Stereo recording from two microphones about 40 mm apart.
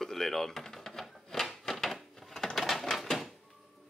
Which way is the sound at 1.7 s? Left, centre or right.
Centre.